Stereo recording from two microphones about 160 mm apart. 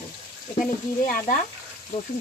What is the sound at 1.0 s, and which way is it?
Speech, 60° left (ahead or behind).